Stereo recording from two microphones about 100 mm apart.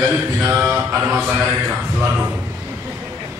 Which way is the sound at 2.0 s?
15° right (ahead or behind).